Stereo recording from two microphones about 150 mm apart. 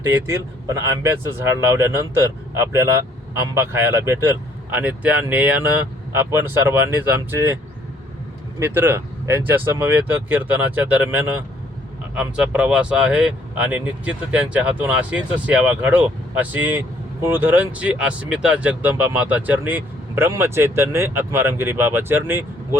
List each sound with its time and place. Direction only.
0.0 s speech: 15° right (ahead or behind)
8.5 s speech: 15° right (ahead or behind)